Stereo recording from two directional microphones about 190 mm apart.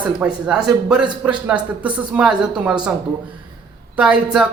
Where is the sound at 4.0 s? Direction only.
5° right (ahead or behind).